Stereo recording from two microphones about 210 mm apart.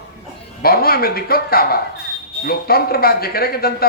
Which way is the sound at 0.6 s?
45° left (ahead or behind).